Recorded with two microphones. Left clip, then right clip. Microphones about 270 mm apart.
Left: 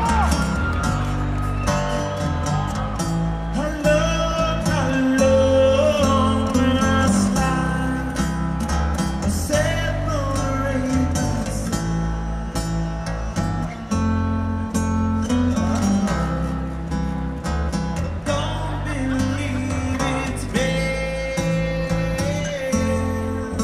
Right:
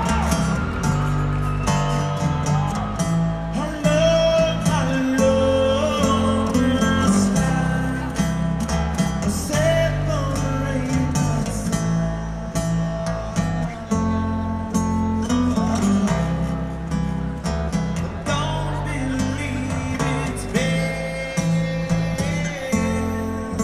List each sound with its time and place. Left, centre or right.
0.0 s music: centre
3.5 s music: centre
4.0 s music: left
4.6 s music: centre
5.7 s music: left
6.4 s music: centre
15.5 s music: centre
20.0 s music: left